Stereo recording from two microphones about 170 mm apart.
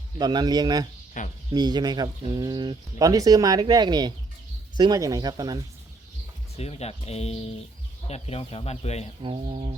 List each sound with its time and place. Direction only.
0.2 s speech: 25° right (ahead or behind)
1.2 s speech: 50° left (ahead or behind)
1.5 s speech: 25° right (ahead or behind)
6.6 s speech: 40° left (ahead or behind)
9.2 s speech: 35° right (ahead or behind)